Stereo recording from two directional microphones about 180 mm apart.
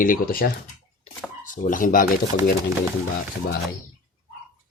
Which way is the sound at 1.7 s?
50° left (ahead or behind).